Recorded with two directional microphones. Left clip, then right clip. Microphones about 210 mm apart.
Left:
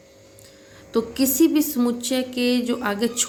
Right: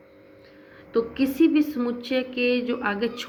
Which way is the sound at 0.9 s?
55° left (ahead or behind).